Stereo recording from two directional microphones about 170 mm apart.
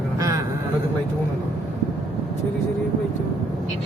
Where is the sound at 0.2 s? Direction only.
20° right (ahead or behind).